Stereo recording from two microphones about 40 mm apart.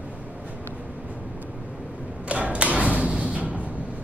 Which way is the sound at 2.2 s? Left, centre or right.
Right.